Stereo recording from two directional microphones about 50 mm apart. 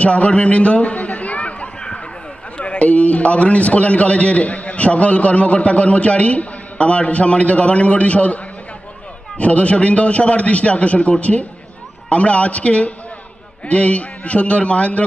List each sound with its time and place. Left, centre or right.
0.0 s a sound: left
2.5 s a man's voice: left
9.4 s a man's voice: left